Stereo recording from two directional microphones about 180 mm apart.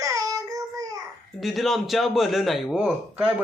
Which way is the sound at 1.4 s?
Centre (ahead or behind).